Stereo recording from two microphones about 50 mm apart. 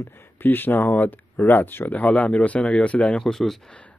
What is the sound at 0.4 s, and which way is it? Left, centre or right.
A man's voice, left.